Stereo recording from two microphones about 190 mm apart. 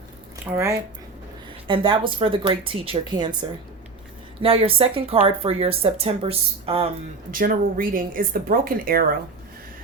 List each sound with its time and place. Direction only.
0.5 s speech: 15° right (ahead or behind)
1.6 s speech: 25° right (ahead or behind)
4.4 s speech: 30° right (ahead or behind)
7.3 s speech: 45° right (ahead or behind)